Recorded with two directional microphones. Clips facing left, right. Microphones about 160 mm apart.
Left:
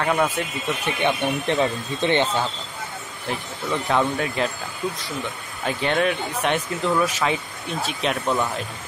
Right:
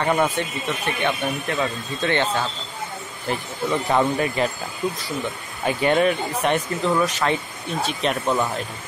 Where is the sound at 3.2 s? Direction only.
5° right (ahead or behind).